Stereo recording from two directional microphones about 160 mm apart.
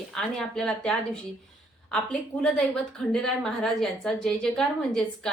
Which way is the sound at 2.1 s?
5° left (ahead or behind).